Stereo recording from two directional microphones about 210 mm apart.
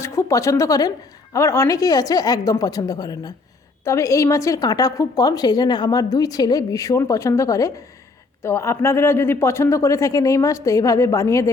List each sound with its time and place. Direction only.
0.0 s a woman's voice: 15° left (ahead or behind)